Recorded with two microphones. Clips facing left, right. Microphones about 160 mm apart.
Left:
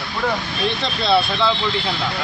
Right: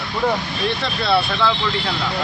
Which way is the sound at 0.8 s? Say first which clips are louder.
Left 2 dB; 20° left (ahead or behind).